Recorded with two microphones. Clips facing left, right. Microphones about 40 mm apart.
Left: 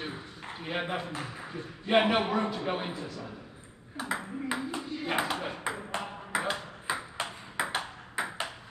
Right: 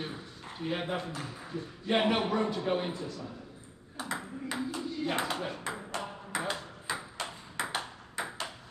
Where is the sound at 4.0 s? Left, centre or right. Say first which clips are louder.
Left 3 dB; centre.